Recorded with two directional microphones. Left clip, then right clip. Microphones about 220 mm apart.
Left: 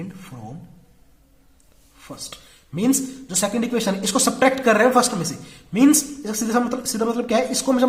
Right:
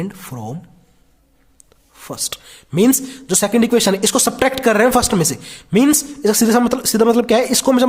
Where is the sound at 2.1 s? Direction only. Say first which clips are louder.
Right 10 dB; 50° right (ahead or behind).